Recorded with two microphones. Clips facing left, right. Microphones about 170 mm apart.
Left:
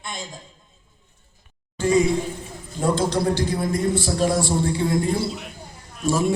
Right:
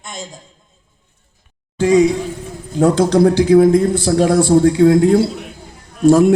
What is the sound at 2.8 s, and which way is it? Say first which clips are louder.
A man's voice: right 10 dB; 80° right.